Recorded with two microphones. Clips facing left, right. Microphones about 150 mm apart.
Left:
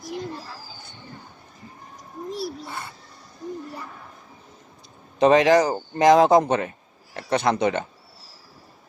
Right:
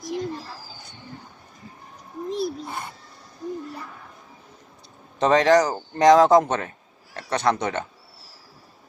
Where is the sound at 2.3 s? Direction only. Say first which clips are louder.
Right 4 dB; 20° right (ahead or behind).